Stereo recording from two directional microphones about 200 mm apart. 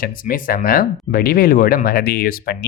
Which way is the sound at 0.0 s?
45° left (ahead or behind).